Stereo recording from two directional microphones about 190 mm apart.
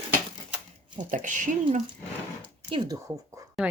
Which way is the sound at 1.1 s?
40° right (ahead or behind).